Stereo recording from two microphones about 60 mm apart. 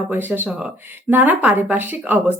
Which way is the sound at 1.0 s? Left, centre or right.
Right.